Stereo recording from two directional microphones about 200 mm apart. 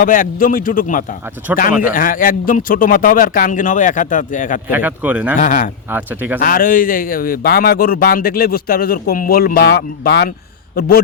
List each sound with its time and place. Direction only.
0.0 s a man's voice: 45° left (ahead or behind)
1.4 s speech: 10° right (ahead or behind)
1.8 s speech: 40° left (ahead or behind)
4.7 s speech: 10° right (ahead or behind)
5.4 s a man's voice: 45° left (ahead or behind)
5.9 s speech: 10° right (ahead or behind)
6.4 s a man's voice: 45° left (ahead or behind)